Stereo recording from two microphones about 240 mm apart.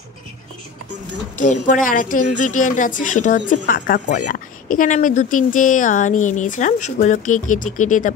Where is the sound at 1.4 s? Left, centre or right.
Left.